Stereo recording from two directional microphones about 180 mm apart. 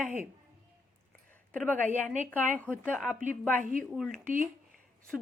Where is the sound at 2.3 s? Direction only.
10° left (ahead or behind).